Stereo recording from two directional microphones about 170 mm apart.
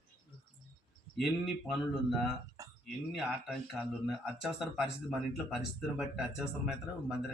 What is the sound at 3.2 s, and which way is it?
A man's voice, centre (ahead or behind).